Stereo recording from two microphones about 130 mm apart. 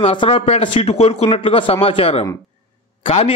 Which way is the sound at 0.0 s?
45° left (ahead or behind).